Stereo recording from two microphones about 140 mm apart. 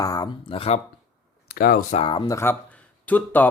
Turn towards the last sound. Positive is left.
turn(degrees=10)  # may be behind; listen again after turning